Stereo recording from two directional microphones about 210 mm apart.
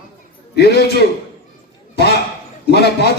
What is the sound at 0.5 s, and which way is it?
Speech, 50° left (ahead or behind).